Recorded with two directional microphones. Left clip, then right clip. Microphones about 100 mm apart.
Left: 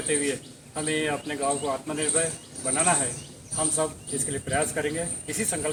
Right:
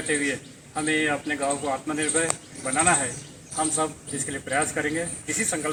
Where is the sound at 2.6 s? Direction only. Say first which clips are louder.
Right 3 dB; 45° left (ahead or behind).